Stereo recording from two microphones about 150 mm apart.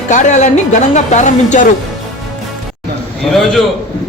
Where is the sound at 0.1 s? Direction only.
55° left (ahead or behind).